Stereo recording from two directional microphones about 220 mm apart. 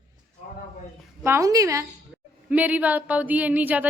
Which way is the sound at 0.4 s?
35° left (ahead or behind).